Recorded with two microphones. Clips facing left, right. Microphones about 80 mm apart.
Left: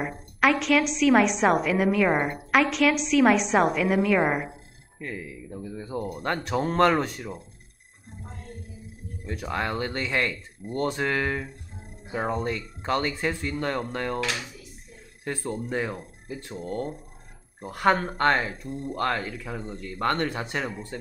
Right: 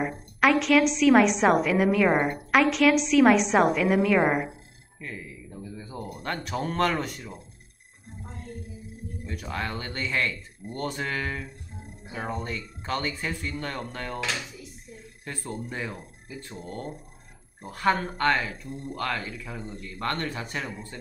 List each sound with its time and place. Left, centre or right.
0.0 s a woman's voice: centre
5.0 s speech: left
5.7 s speech: left
6.2 s speech: left
9.2 s speech: left
12.5 s speech: left
13.1 s speech: left
16.4 s speech: left
18.1 s speech: left